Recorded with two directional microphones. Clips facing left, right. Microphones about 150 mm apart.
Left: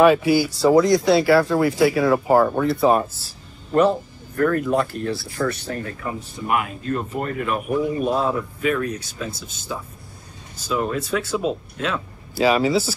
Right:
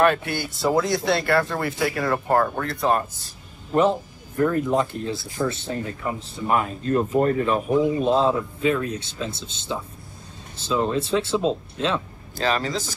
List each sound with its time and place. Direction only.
0.0 s speech: 5° left (ahead or behind)
4.4 s speech: 20° right (ahead or behind)
12.4 s speech: 10° left (ahead or behind)